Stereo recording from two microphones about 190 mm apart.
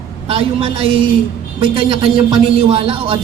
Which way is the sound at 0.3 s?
30° right (ahead or behind).